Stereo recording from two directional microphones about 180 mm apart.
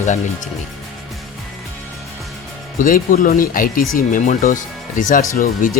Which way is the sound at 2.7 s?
50° left (ahead or behind).